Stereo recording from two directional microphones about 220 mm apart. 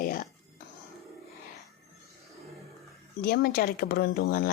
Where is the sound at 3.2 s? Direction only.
40° left (ahead or behind).